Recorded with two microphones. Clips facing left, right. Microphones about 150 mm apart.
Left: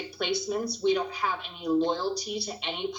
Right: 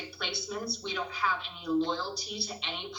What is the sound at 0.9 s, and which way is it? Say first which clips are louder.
Speech: left 8 dB; 45° left (ahead or behind).